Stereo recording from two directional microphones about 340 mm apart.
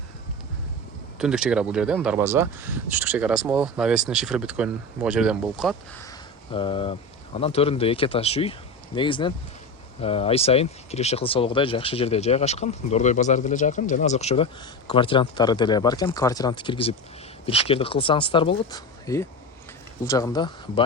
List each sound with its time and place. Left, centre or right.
1.2 s speech: centre
6.1 s a sound: centre
7.3 s speech: centre